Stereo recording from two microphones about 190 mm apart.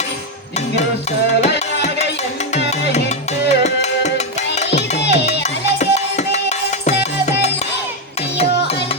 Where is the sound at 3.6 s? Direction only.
35° left (ahead or behind).